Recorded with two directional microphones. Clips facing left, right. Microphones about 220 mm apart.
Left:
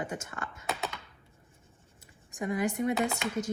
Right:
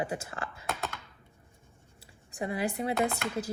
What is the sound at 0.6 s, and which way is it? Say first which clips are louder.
Computer keyboard: left 2 dB; centre (ahead or behind).